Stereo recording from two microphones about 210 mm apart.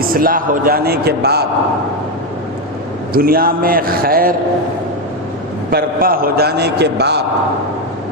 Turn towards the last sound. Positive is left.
turn(degrees=-50)  # may be behind; listen again after turning